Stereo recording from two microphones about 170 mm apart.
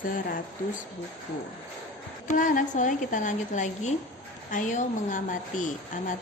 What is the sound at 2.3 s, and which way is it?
A woman's voice, 50° left (ahead or behind).